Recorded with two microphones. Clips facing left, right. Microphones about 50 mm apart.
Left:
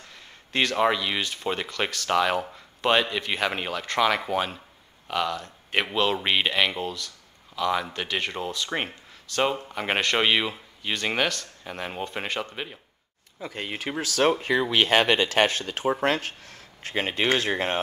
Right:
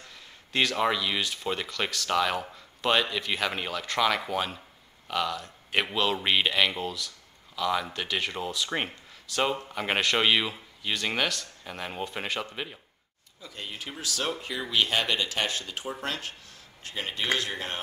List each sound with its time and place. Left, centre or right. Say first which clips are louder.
0.5 s speech: left 3 dB; centre
13.4 s speech: left 7 dB; left